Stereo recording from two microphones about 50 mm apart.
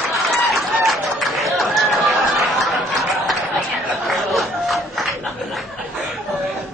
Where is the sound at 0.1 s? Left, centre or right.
Centre.